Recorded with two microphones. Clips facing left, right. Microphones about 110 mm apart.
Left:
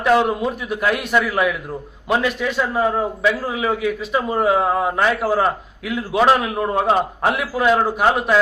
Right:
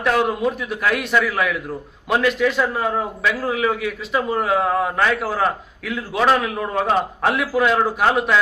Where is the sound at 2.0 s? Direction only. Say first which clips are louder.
Right 2 dB; centre (ahead or behind).